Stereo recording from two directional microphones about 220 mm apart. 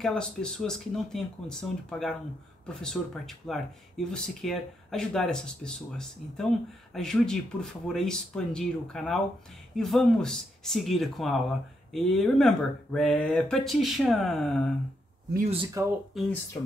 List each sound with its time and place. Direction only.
0.0 s speech: 5° left (ahead or behind)
15.5 s speech: 25° right (ahead or behind)
16.1 s speech: centre (ahead or behind)